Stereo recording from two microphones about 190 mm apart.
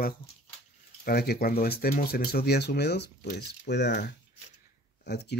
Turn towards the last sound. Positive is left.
turn(degrees=60)  # may be behind; listen again after turning